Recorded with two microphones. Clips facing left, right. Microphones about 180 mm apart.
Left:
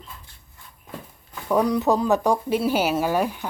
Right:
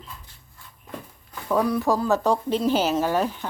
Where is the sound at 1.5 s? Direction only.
20° left (ahead or behind).